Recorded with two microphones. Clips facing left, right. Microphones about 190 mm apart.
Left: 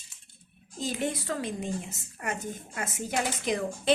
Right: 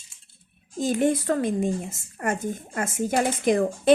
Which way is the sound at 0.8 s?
50° right (ahead or behind).